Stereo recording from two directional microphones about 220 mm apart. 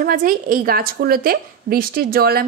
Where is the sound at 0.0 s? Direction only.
40° right (ahead or behind).